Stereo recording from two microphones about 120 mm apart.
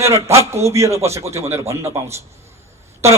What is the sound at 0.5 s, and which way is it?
A man's voice, 25° right (ahead or behind).